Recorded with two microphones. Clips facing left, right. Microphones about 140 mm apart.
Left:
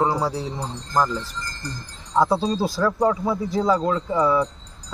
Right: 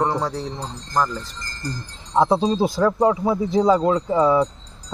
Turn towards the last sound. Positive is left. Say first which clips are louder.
# right 3 dB
turn(degrees=-25)  # may be behind; listen again after turning